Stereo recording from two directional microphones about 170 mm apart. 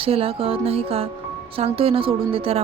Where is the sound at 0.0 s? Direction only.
35° right (ahead or behind).